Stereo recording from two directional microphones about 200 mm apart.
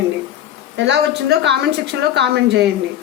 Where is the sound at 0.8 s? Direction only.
60° right (ahead or behind).